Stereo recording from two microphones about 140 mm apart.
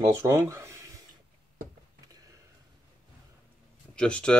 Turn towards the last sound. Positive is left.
turn(degrees=5)  # may be behind; listen again after turning